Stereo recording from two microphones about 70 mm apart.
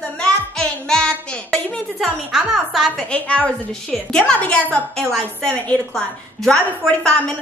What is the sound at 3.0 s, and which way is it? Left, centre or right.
Speech, centre.